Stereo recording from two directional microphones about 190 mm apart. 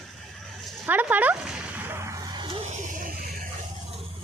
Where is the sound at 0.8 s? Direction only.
10° right (ahead or behind).